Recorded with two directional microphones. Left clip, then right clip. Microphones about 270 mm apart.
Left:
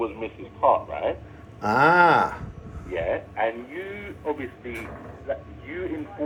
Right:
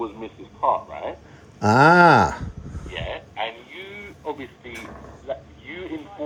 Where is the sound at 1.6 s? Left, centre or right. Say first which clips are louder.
Right 4 dB; right.